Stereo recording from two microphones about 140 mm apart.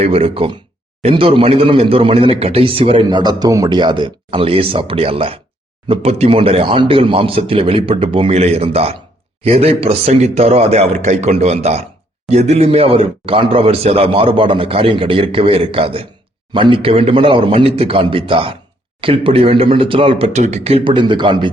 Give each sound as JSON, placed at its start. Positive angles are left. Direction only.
{"t": 0.0, "sound": "speech", "side_deg": -45}